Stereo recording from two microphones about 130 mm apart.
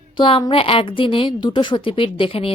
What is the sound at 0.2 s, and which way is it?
A woman's voice, 40° left (ahead or behind).